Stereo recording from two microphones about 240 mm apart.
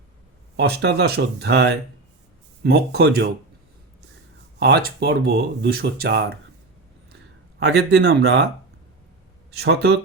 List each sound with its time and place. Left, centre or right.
0.5 s speech: right
4.6 s speech: right
7.6 s speech: right
9.5 s speech: right